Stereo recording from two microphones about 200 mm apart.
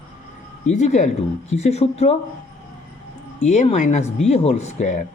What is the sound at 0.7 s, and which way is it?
Speech, 35° left (ahead or behind).